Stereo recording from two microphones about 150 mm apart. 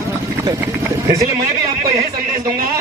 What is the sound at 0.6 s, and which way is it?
Vehicle, 20° right (ahead or behind).